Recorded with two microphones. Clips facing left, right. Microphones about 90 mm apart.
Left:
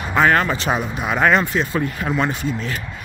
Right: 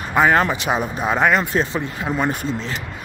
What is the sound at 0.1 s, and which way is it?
Speech, 15° right (ahead or behind).